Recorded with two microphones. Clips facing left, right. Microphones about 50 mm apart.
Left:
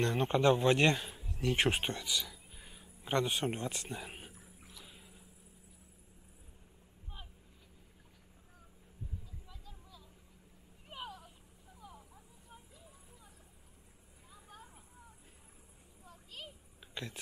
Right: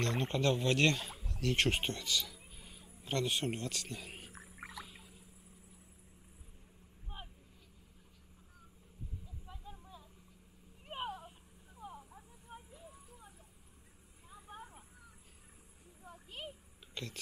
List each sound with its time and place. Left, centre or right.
0.0 s speech: centre
2.5 s a sound: centre
4.8 s rowboat: centre
7.1 s vehicle: right
9.5 s vehicle: right
10.9 s a sound: right
14.3 s vehicle: right
16.0 s a sound: right
16.9 s speech: centre